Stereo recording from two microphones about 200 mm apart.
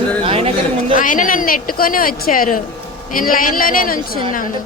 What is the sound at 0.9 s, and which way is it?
Speech, 40° left (ahead or behind).